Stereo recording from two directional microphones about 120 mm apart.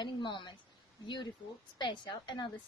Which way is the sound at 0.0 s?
40° left (ahead or behind).